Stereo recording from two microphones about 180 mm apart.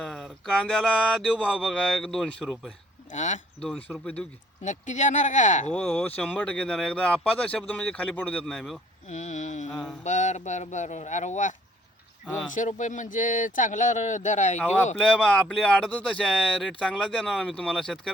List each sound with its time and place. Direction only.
0.0 s speech: 5° left (ahead or behind)
3.1 s speech: 40° left (ahead or behind)
3.6 s speech: 5° left (ahead or behind)
4.6 s speech: 40° left (ahead or behind)
5.7 s speech: 10° left (ahead or behind)
9.0 s a sound: 40° left (ahead or behind)
10.0 s speech: 40° left (ahead or behind)
12.5 s speech: 45° left (ahead or behind)
14.9 s speech: 5° left (ahead or behind)